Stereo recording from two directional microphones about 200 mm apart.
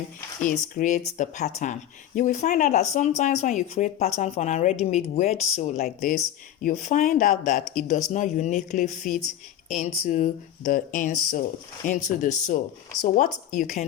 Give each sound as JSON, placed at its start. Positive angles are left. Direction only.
{"t": 0.4, "sound": "speech", "side_deg": 40}
{"t": 5.8, "sound": "speech", "side_deg": 40}